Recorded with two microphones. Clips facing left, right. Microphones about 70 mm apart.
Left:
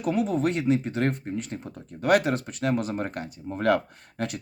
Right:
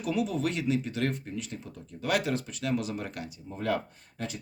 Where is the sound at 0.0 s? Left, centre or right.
Left.